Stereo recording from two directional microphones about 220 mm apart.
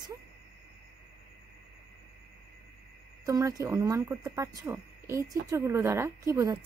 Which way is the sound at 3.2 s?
15° right (ahead or behind).